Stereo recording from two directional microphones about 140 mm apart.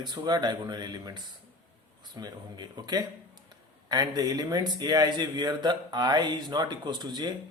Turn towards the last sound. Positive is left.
turn(degrees=-30)  # may be behind; listen again after turning